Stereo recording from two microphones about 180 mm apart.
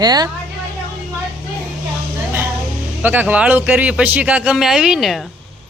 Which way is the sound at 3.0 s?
10° right (ahead or behind).